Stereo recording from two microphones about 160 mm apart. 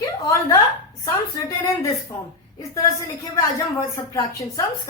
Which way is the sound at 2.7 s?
20° left (ahead or behind).